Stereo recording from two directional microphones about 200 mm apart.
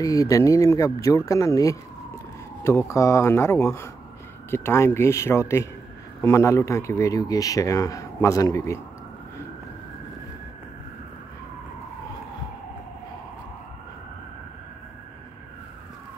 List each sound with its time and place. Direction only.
0.0 s speech: 15° left (ahead or behind)